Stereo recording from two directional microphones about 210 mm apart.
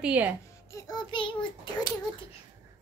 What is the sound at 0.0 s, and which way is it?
Speech, 10° right (ahead or behind).